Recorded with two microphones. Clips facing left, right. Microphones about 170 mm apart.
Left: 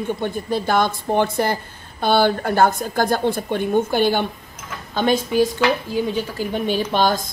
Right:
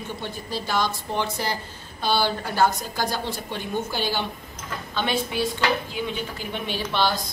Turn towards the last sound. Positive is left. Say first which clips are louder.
# left 6 dB
turn(degrees=45)  # may be behind; listen again after turning